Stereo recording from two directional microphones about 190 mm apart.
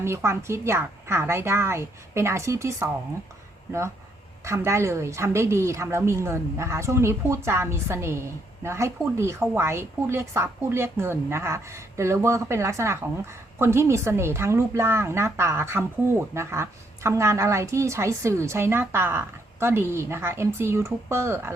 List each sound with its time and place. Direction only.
0.0 s a woman's voice: 15° right (ahead or behind)